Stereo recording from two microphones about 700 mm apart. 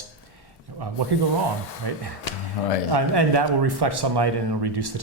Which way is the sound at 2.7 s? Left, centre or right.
Left.